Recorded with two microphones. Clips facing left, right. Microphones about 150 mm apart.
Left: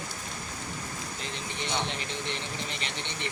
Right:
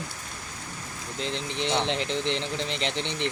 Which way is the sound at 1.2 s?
90° right.